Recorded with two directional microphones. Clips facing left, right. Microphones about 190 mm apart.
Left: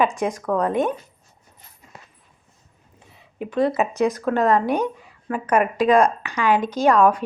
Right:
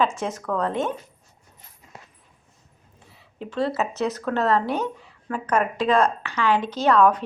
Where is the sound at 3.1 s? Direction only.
15° left (ahead or behind).